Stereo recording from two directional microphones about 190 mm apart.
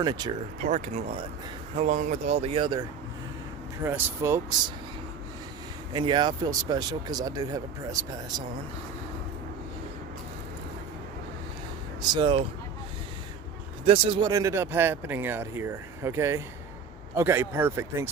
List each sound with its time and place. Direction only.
0.0 s speech: 20° right (ahead or behind)
0.6 s speech: 35° right (ahead or behind)
3.8 s speech: 15° right (ahead or behind)
5.9 s speech: 25° right (ahead or behind)
12.1 s speech: 25° right (ahead or behind)
13.8 s speech: 30° right (ahead or behind); by 18.1 s 10° right (ahead or behind)